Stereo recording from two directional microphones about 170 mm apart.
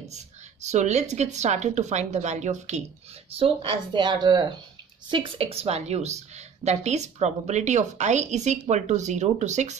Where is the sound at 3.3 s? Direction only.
30° right (ahead or behind).